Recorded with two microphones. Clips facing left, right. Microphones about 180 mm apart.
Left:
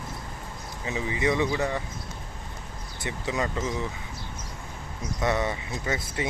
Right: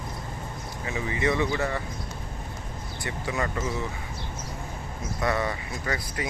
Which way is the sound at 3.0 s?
20° left (ahead or behind).